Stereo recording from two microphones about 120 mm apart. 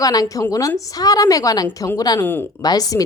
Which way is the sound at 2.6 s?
30° left (ahead or behind).